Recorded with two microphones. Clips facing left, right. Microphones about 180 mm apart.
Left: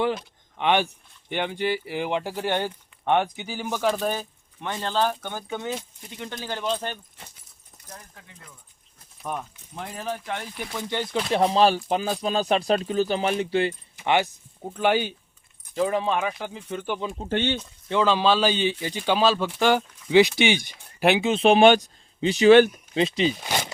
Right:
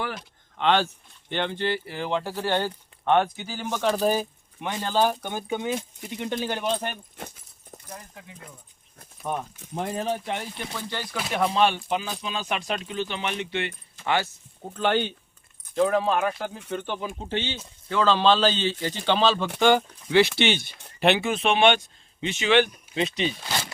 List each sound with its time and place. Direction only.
0.6 s speech: 15° left (ahead or behind)
4.0 s speech: 10° right (ahead or behind)
7.9 s speech: 15° right (ahead or behind)
10.8 s speech: 15° left (ahead or behind); by 13.7 s 35° left (ahead or behind)
13.9 s speech: 20° left (ahead or behind); by 16.8 s centre (ahead or behind)
17.2 s speech: 55° left (ahead or behind)
17.8 s speech: 15° left (ahead or behind)
20.1 s speech: 15° left (ahead or behind)
21.2 s speech: 30° left (ahead or behind)
23.4 s a sound: 15° left (ahead or behind)